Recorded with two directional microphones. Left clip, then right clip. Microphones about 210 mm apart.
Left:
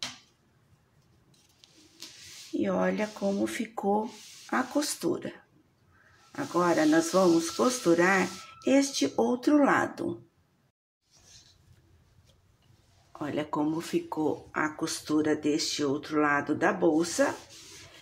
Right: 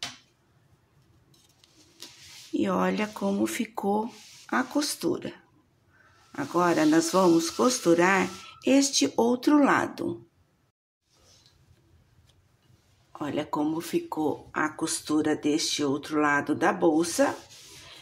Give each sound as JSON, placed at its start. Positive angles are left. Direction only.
{"t": 1.3, "sound": "patter", "side_deg": 0}
{"t": 2.5, "sound": "speech", "side_deg": -25}
{"t": 13.1, "sound": "speech", "side_deg": -10}